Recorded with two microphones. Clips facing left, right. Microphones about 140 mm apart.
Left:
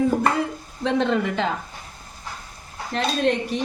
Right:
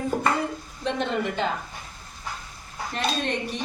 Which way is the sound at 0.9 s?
90° left.